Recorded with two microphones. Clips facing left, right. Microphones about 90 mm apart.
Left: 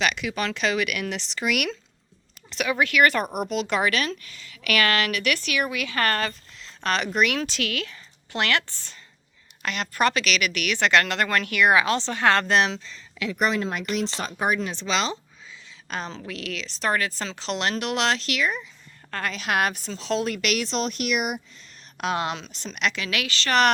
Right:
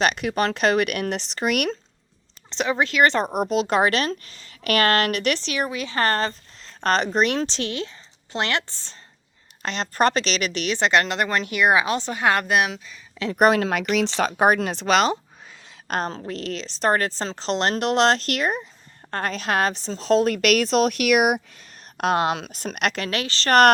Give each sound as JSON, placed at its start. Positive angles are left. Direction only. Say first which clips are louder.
{"t": 0.0, "sound": "a woman's voice", "louder": "right 4 dB", "side_deg": -45}
{"t": 2.5, "sound": "speech", "louder": "right 1 dB", "side_deg": -30}
{"t": 5.4, "sound": "a woman's voice", "louder": "right 1 dB", "side_deg": -25}
{"t": 13.3, "sound": "a woman's voice", "louder": "right 7 dB", "side_deg": -60}